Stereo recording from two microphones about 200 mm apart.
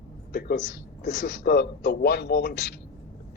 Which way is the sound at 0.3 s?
55° left (ahead or behind).